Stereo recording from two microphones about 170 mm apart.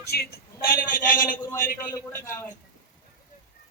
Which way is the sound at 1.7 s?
15° left (ahead or behind).